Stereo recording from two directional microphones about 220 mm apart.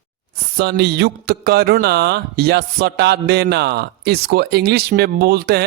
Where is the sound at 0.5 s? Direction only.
50° right (ahead or behind).